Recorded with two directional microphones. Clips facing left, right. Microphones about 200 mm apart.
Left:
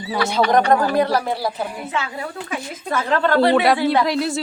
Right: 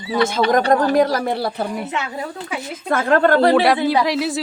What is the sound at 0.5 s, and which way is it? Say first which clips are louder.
Speech: right 1 dB; 45° right (ahead or behind).